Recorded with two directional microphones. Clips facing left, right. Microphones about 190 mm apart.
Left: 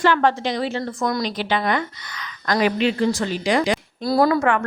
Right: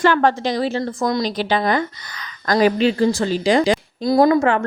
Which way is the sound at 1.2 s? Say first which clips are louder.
Right 3 dB; 35° right (ahead or behind).